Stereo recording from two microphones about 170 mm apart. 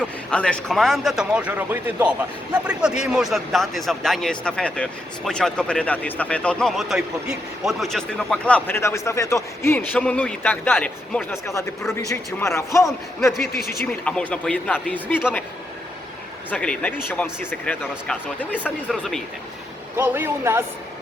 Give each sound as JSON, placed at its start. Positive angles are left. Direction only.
{"t": 0.3, "sound": "a man's voice", "side_deg": 5}
{"t": 11.4, "sound": "a man's voice", "side_deg": 15}
{"t": 13.5, "sound": "speech", "side_deg": 65}
{"t": 14.0, "sound": "a man's voice", "side_deg": 5}
{"t": 16.5, "sound": "a man's voice", "side_deg": 5}
{"t": 20.0, "sound": "speech", "side_deg": -15}